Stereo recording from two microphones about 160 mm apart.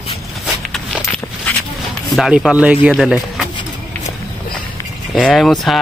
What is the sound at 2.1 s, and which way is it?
Speech, centre (ahead or behind).